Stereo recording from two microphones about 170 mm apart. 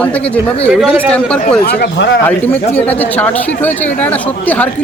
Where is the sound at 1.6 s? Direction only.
75° left (ahead or behind).